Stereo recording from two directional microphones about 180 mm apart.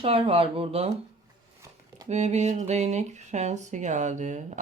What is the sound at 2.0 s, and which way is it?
Speech, 40° right (ahead or behind).